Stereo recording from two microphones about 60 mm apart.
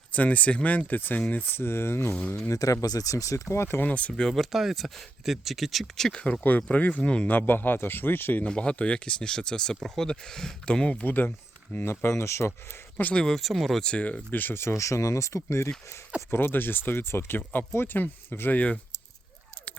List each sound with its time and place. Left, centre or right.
0.1 s speech: left
2.1 s speech: left
2.5 s speech: left
3.8 s speech: left
4.2 s speech: centre
6.1 s speech: centre
6.6 s speech: left
7.3 s speech: left
8.4 s speech: centre
11.0 s speech: left
13.1 s speech: centre
13.8 s speech: centre; by 14.7 s left
14.7 s speech: left
16.3 s speech: left